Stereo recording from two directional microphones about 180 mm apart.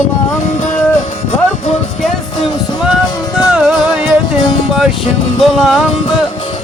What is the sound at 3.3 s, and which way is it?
Music, 5° right (ahead or behind).